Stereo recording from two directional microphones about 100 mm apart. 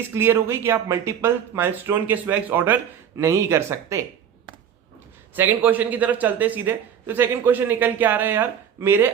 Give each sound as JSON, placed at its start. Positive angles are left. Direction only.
{"t": 0.1, "sound": "a man's voice", "side_deg": -25}
{"t": 5.3, "sound": "a man's voice", "side_deg": -20}